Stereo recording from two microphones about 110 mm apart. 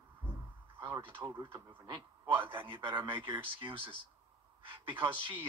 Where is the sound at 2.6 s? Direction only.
50° right (ahead or behind).